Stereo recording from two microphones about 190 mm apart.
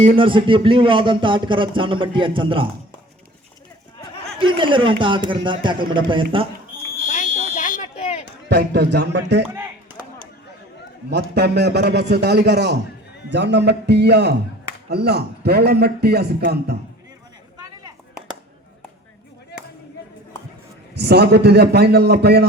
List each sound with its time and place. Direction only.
0.2 s speech: 25° right (ahead or behind)
4.4 s speech: 25° right (ahead or behind)
7.1 s fire alarm: 40° left (ahead or behind)
8.4 s a man's voice: 60° right (ahead or behind)
11.1 s a man's voice: 60° right (ahead or behind)
19.5 s a sound: 60° left (ahead or behind)
20.9 s a man's voice: 60° right (ahead or behind)